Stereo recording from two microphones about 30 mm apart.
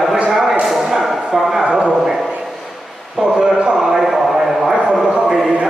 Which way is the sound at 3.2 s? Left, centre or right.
Right.